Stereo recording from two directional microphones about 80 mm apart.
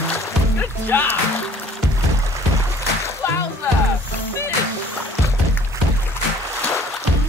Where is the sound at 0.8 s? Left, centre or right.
Left.